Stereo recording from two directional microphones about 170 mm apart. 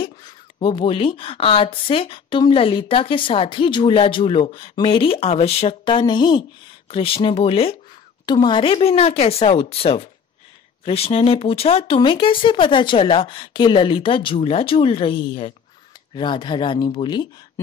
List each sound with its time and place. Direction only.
0.0 s speech: 30° left (ahead or behind)